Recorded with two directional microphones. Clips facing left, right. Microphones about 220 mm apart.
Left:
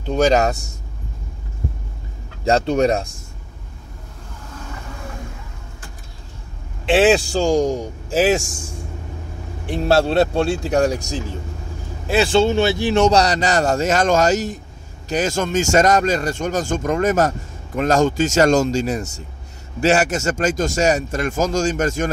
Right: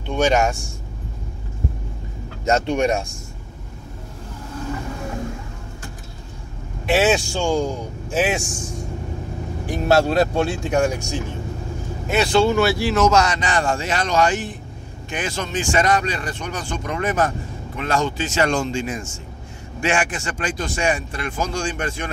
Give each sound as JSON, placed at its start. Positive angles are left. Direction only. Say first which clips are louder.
{"t": 0.0, "sound": "speech", "louder": "left 3 dB", "side_deg": 35}
{"t": 2.4, "sound": "speech", "louder": "left 3 dB", "side_deg": 35}
{"t": 6.9, "sound": "speech", "louder": "left 4 dB", "side_deg": 35}
{"t": 9.7, "sound": "speech", "louder": "left 1 dB", "side_deg": 30}
{"t": 13.0, "sound": "speech", "louder": "left 2 dB", "side_deg": 35}